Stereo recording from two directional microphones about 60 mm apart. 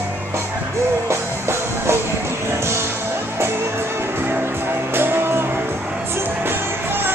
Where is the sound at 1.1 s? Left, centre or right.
Right.